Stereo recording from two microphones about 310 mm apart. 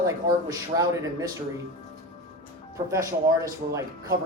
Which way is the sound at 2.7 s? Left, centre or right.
Centre.